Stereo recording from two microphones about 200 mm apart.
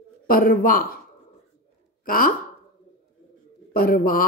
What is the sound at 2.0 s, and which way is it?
Speech, 45° left (ahead or behind).